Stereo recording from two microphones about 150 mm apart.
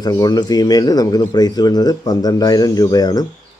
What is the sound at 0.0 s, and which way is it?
Speech, 25° left (ahead or behind).